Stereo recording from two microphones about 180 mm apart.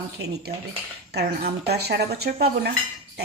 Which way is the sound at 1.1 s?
65° right (ahead or behind).